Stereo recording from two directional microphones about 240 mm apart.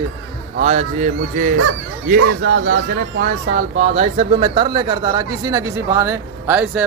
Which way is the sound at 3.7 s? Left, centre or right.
Right.